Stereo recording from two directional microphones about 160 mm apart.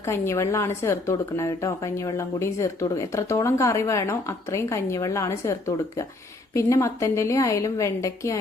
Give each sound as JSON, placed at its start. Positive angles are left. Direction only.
{"t": 0.0, "sound": "a woman's voice", "side_deg": 20}